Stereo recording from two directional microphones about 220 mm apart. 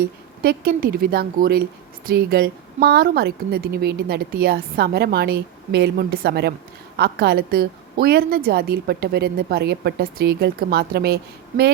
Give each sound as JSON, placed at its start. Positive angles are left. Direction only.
{"t": 0.4, "sound": "a woman's voice", "side_deg": -45}